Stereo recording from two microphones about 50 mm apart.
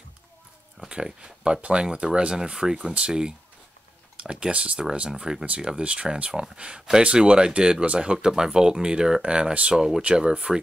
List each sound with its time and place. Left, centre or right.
0.7 s speech: centre